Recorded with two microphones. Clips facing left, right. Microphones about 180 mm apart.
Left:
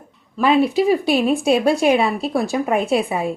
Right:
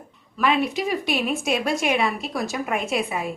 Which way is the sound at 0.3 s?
30° left (ahead or behind).